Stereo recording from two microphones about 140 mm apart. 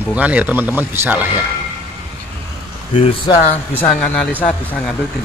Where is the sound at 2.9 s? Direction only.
40° left (ahead or behind).